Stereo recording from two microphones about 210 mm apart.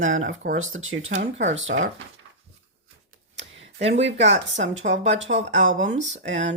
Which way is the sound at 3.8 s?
60° right (ahead or behind).